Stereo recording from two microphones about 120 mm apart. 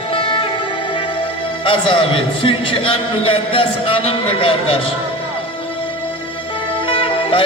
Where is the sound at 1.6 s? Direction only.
45° left (ahead or behind).